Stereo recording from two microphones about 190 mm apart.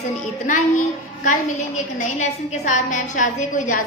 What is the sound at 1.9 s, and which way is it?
A woman's voice, 40° left (ahead or behind).